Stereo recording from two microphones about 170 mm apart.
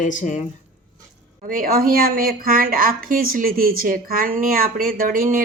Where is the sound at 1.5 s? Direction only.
55° right (ahead or behind).